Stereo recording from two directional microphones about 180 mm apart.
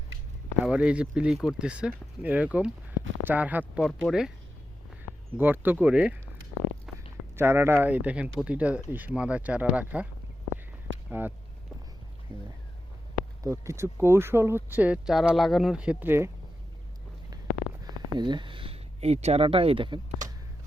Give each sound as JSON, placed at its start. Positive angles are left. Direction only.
{"t": 0.6, "sound": "speech", "side_deg": -5}
{"t": 5.4, "sound": "speech", "side_deg": -10}
{"t": 6.9, "sound": "a sound", "side_deg": 0}
{"t": 7.3, "sound": "speech", "side_deg": -15}
{"t": 11.2, "sound": "speech", "side_deg": -10}
{"t": 13.4, "sound": "speech", "side_deg": -15}
{"t": 17.8, "sound": "speech", "side_deg": -25}